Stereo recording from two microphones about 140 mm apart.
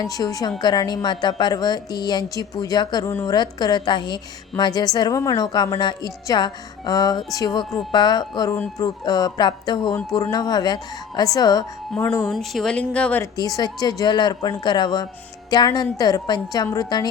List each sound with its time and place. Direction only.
0.0 s speech: 25° left (ahead or behind)
11.9 s speech: 15° left (ahead or behind)
12.2 s speech: centre (ahead or behind)
13.6 s speech: 30° left (ahead or behind)